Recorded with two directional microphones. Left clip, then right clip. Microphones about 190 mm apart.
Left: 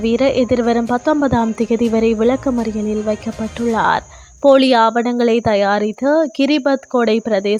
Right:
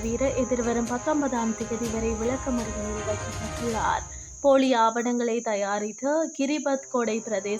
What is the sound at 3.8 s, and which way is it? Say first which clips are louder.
Speech: left 11 dB; 40° left (ahead or behind).